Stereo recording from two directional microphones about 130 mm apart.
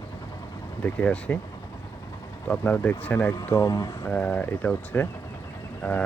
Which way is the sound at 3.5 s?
25° left (ahead or behind).